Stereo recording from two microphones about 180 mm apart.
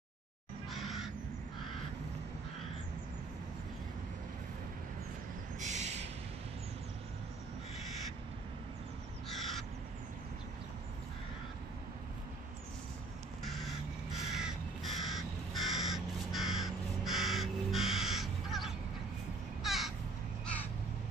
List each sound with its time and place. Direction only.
0.7 s bird: centre (ahead or behind)
5.6 s a sound: 40° right (ahead or behind)
9.3 s crow: centre (ahead or behind)
14.3 s crow: centre (ahead or behind)